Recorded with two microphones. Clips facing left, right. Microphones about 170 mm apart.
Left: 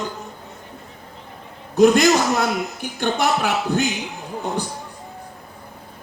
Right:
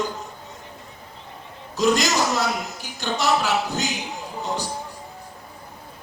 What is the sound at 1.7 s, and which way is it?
A man's voice, 60° left (ahead or behind).